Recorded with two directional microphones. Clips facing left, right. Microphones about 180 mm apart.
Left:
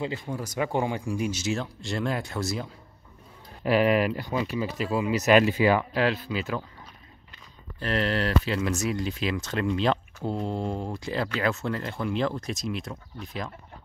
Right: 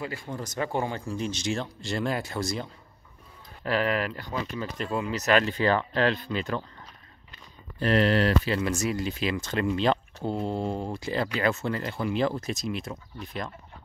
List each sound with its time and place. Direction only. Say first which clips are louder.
0.0 s speech: left 4 dB; 20° left (ahead or behind)
0.3 s speech: even; 10° left (ahead or behind)
3.6 s speech: left 5 dB; 15° left (ahead or behind)
7.8 s speech: right 4 dB; 10° right (ahead or behind)
8.5 s speech: even; centre (ahead or behind)